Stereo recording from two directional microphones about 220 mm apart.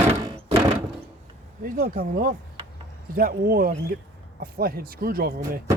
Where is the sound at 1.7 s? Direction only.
40° right (ahead or behind).